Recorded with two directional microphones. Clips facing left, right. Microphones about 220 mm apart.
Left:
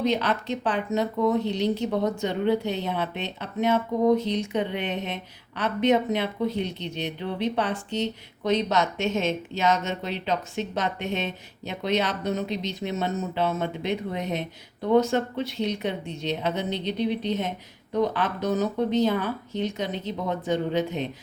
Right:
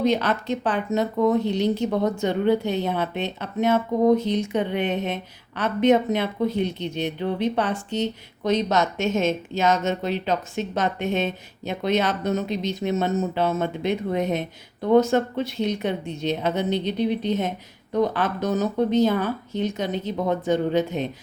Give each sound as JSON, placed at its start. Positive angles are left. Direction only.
{"t": 0.0, "sound": "speech", "side_deg": -45}